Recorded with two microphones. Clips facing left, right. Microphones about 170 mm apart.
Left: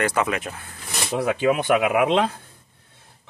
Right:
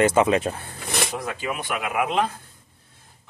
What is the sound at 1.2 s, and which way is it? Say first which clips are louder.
Speech: left 9 dB; 70° left (ahead or behind).